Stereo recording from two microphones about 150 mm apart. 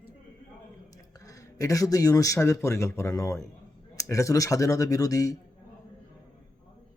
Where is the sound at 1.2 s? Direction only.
20° left (ahead or behind).